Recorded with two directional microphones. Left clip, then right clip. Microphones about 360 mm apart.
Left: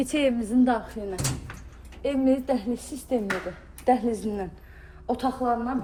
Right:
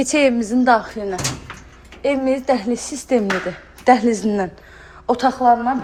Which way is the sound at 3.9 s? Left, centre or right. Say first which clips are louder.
Right 10 dB; right.